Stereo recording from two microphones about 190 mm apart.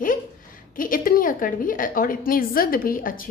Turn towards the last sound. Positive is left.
turn(degrees=45)  # may be behind; listen again after turning